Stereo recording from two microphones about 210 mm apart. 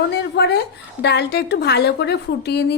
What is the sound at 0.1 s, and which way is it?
A woman's voice, 50° left (ahead or behind).